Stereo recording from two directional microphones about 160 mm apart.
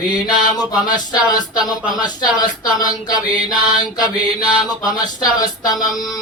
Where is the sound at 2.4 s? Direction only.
25° left (ahead or behind).